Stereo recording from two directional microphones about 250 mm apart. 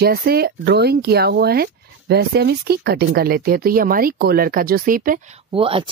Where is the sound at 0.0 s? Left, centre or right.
Right.